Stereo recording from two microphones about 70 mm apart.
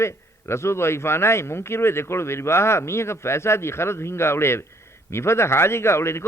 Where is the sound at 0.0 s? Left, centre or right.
Left.